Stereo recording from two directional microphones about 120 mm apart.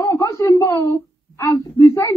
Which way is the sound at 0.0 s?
25° left (ahead or behind).